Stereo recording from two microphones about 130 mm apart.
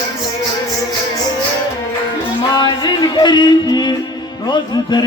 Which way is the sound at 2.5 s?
35° left (ahead or behind).